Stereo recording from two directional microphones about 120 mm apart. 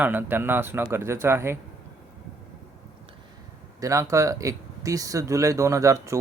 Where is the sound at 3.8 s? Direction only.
25° right (ahead or behind).